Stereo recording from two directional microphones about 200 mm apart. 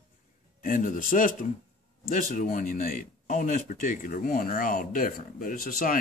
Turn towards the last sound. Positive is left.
turn(degrees=45)  # may be behind; listen again after turning